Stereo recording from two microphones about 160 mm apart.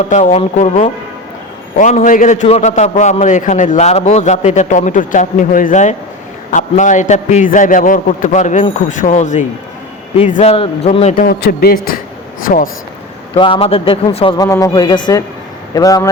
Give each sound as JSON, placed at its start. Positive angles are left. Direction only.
{"t": 0.0, "sound": "a man's voice", "side_deg": 45}
{"t": 1.8, "sound": "a man's voice", "side_deg": 50}
{"t": 11.2, "sound": "a man's voice", "side_deg": 70}
{"t": 12.4, "sound": "speech", "side_deg": 60}
{"t": 13.3, "sound": "a man's voice", "side_deg": 35}
{"t": 14.3, "sound": "a man's voice", "side_deg": 20}